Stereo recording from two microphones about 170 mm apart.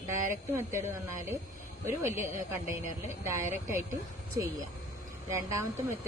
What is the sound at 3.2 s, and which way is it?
Speech, 15° right (ahead or behind).